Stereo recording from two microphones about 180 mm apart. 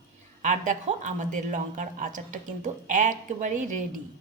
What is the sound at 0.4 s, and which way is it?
Speech, 45° right (ahead or behind).